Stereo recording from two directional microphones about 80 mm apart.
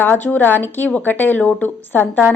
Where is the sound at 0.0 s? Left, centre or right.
Left.